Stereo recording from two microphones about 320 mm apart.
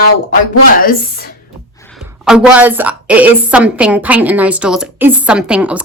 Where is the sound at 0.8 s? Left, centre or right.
Left.